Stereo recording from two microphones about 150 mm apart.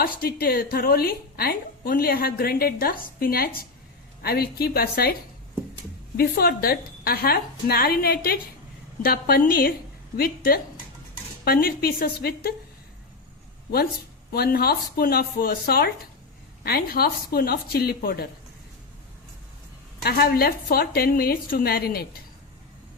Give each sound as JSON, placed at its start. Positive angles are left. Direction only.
{"t": 0.0, "sound": "a woman's voice", "side_deg": 80}
{"t": 6.1, "sound": "a woman's voice", "side_deg": 90}
{"t": 14.3, "sound": "a woman's voice", "side_deg": 90}
{"t": 20.0, "sound": "a woman's voice", "side_deg": 90}